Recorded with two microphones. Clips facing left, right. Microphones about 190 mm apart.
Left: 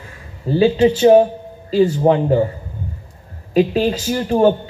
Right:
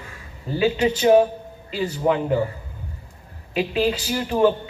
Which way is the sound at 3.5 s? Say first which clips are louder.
Left 6 dB; 40° left (ahead or behind).